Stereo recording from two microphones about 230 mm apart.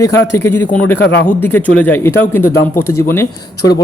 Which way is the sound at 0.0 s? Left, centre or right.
Centre.